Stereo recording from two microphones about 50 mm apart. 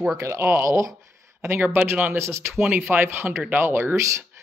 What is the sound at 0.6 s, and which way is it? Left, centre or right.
Speech, right.